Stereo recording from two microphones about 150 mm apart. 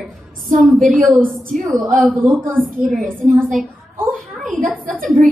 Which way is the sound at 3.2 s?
Centre (ahead or behind).